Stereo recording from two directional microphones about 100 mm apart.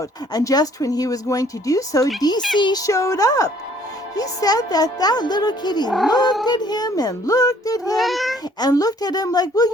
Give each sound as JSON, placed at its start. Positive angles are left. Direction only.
{"t": 0.3, "sound": "speech", "side_deg": 40}
{"t": 2.6, "sound": "a woman's voice", "side_deg": 50}
{"t": 2.8, "sound": "a woman's voice", "side_deg": 35}
{"t": 7.9, "sound": "a child's voice", "side_deg": 0}
{"t": 8.6, "sound": "speech", "side_deg": 40}